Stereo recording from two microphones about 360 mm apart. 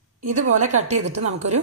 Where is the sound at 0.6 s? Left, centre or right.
Centre.